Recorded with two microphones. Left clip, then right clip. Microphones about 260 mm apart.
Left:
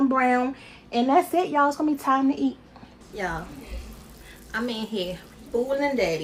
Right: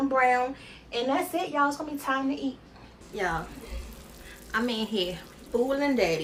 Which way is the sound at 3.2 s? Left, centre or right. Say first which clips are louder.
Right 1 dB; centre.